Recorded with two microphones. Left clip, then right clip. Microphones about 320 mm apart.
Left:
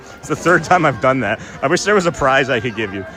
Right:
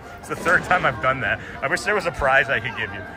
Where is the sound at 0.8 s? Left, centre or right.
Centre.